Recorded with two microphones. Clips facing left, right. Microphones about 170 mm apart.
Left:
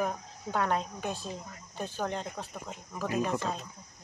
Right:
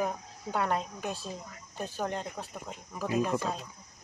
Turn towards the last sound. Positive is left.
turn(degrees=-5)  # may be behind; listen again after turning